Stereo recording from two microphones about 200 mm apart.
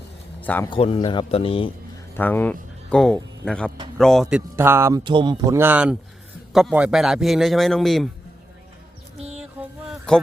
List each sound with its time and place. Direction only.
0.4 s a man's voice: 10° left (ahead or behind)
0.7 s speech: 25° left (ahead or behind)
2.1 s a man's voice: 10° left (ahead or behind); by 5.5 s 25° right (ahead or behind)
5.5 s a man's voice: 10° right (ahead or behind)
9.1 s a sound: 30° right (ahead or behind)
9.4 s a sound: 5° right (ahead or behind)